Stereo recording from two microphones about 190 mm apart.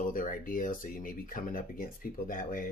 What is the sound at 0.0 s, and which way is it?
Speech, 45° left (ahead or behind).